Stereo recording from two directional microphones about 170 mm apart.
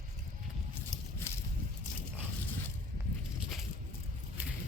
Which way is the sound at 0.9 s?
20° left (ahead or behind).